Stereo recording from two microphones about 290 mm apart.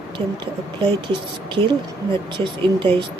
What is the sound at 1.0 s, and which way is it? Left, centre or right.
Speech, centre.